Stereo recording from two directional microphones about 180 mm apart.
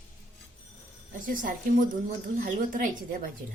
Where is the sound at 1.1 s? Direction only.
45° right (ahead or behind).